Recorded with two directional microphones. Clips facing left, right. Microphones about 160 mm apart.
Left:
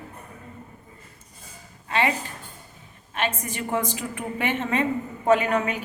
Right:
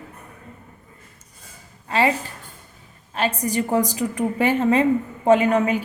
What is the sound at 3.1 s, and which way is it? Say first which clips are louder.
A woman's voice: right 6 dB; 35° right (ahead or behind).